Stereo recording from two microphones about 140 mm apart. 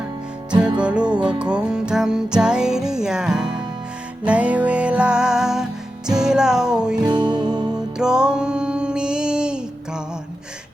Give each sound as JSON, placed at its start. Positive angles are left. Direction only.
{"t": 0.8, "sound": "music", "side_deg": -10}
{"t": 7.0, "sound": "music", "side_deg": -30}
{"t": 7.9, "sound": "music", "side_deg": -5}